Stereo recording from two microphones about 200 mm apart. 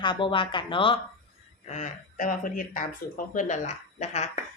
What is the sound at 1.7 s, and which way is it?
A woman's voice, 40° left (ahead or behind).